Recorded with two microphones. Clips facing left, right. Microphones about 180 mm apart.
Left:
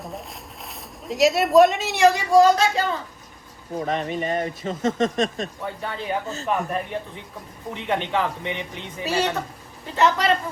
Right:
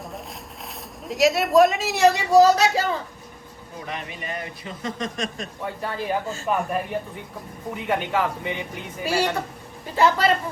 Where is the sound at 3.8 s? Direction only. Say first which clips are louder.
Left 9 dB; 40° left (ahead or behind).